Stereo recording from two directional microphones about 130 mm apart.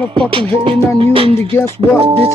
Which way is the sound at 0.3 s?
40° right (ahead or behind).